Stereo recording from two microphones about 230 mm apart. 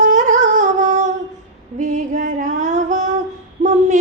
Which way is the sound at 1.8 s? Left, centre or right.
Right.